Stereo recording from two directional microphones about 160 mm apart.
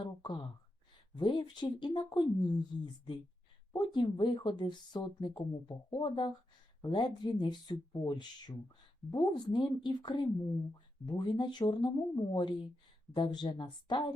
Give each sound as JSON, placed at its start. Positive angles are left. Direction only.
{"t": 0.0, "sound": "a sound", "side_deg": 30}
{"t": 1.1, "sound": "speech", "side_deg": 30}
{"t": 3.7, "sound": "speech", "side_deg": 30}